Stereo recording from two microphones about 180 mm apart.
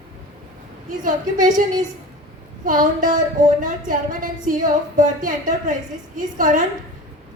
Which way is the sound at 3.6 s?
50° right (ahead or behind).